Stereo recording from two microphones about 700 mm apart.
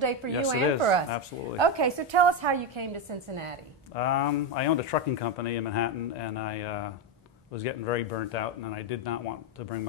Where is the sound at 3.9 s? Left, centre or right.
Left.